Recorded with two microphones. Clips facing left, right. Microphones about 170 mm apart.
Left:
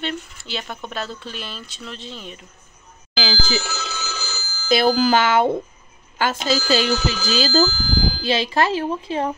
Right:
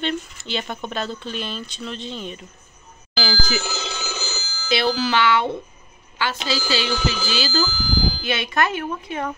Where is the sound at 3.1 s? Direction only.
20° left (ahead or behind).